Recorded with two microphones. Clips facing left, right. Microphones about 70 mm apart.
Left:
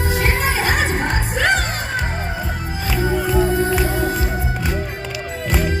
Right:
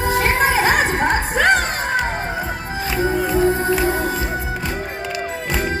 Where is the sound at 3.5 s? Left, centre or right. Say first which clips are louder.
Even; right.